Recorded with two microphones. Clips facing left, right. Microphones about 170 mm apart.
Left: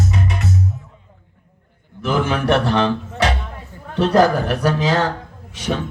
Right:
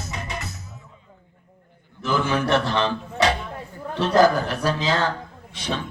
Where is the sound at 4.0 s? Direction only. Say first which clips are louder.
Left 3 dB; 65° left (ahead or behind).